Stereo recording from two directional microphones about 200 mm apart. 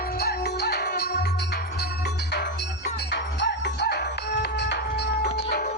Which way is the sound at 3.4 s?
55° left (ahead or behind).